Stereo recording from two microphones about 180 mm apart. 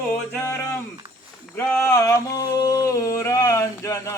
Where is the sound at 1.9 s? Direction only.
15° left (ahead or behind).